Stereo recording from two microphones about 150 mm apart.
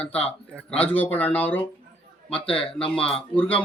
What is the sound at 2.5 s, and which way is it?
Speech, 40° left (ahead or behind).